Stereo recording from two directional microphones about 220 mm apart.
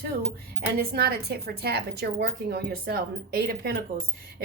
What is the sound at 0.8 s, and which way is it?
A woman's voice, 45° right (ahead or behind).